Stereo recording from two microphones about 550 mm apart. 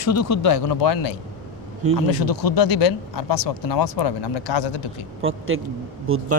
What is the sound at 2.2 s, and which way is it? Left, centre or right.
Speech, left.